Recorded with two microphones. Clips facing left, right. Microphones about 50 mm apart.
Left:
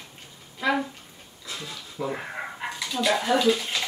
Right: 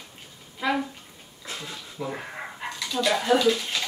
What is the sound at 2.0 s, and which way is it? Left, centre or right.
Dog, centre.